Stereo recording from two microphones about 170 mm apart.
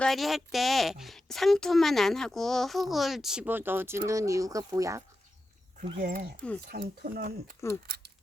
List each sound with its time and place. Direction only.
0.0 s a woman's voice: centre (ahead or behind); by 5.0 s 20° right (ahead or behind)
6.0 s speech: 55° right (ahead or behind)
6.7 s speech: 65° right (ahead or behind)